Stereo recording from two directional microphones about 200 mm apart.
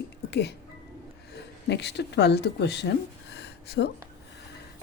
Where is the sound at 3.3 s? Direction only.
55° left (ahead or behind).